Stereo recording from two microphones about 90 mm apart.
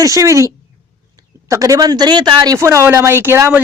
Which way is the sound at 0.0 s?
35° right (ahead or behind).